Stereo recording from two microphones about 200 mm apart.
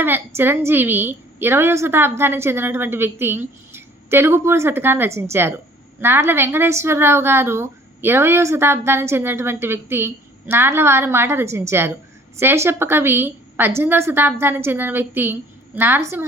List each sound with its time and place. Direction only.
0.0 s a woman's voice: 10° right (ahead or behind)